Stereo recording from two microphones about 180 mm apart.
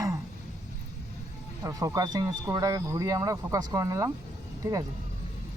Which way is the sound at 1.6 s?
20° right (ahead or behind).